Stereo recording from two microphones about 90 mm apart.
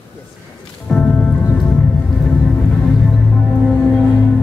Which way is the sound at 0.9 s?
15° left (ahead or behind).